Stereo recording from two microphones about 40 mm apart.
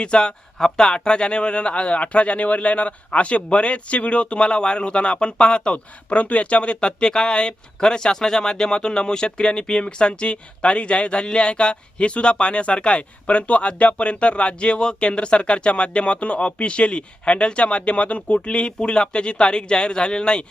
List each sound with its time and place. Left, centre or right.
0.0 s speech: left